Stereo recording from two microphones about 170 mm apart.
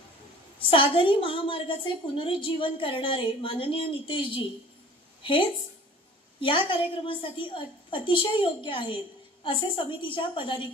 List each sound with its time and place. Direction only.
0.6 s a woman's voice: 30° left (ahead or behind)